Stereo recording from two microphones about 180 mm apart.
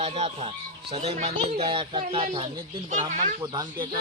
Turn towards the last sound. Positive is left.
turn(degrees=-20)  # may be behind; listen again after turning